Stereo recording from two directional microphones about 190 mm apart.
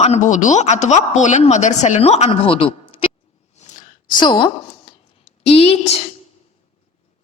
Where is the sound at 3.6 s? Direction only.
40° left (ahead or behind).